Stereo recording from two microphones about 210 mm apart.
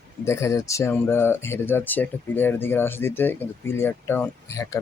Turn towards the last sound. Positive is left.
turn(degrees=15)  # may be behind; listen again after turning